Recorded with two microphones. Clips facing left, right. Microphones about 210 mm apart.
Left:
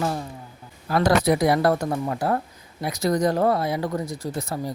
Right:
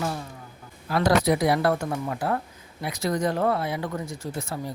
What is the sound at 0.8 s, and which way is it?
Speech, 45° left (ahead or behind).